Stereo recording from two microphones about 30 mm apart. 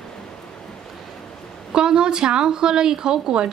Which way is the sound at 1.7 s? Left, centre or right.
Right.